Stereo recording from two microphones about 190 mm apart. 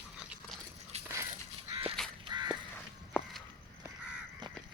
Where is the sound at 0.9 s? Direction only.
35° right (ahead or behind).